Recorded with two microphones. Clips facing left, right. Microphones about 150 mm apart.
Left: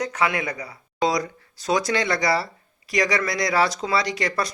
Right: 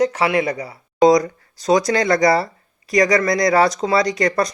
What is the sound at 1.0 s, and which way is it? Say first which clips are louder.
Speech: right 10 dB; 45° right (ahead or behind).